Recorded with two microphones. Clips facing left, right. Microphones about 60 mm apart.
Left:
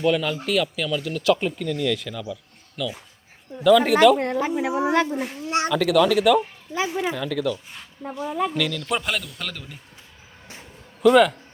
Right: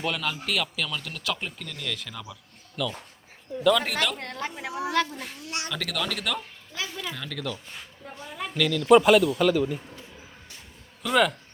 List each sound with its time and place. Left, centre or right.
0.0 s speech: centre
2.3 s a sound: centre
3.6 s a woman's voice: centre; by 5.2 s left
5.7 s speech: centre
6.7 s a woman's voice: left
7.2 s speech: centre
11.0 s speech: centre